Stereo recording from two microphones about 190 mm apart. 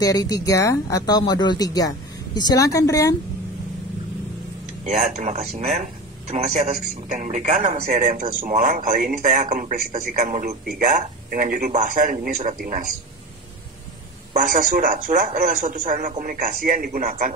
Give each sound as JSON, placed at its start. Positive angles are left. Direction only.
{"t": 0.0, "sound": "speech", "side_deg": 20}
{"t": 4.8, "sound": "a man's voice", "side_deg": -40}
{"t": 14.3, "sound": "a man's voice", "side_deg": -45}